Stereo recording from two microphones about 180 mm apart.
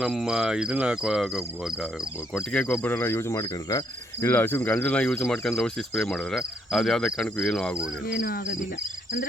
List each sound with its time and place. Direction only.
0.0 s cricket: 5° right (ahead or behind)
8.0 s speech: 55° left (ahead or behind)